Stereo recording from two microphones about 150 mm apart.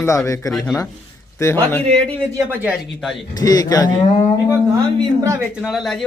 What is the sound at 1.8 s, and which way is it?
Speech, 40° right (ahead or behind).